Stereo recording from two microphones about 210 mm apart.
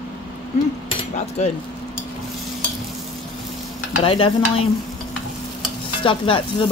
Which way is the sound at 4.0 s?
25° left (ahead or behind).